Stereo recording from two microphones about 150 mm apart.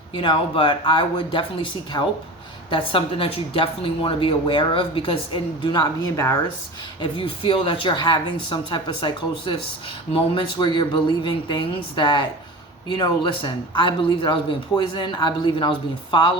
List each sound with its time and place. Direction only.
0.1 s speech: 35° left (ahead or behind)
7.0 s speech: 35° left (ahead or behind)